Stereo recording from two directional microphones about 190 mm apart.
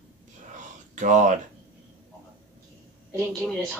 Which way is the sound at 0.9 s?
40° right (ahead or behind).